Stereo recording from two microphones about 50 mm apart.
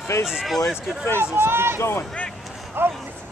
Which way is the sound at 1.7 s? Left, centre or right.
Left.